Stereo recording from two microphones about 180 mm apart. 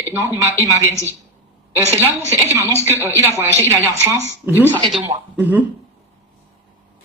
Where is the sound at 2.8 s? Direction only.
15° right (ahead or behind).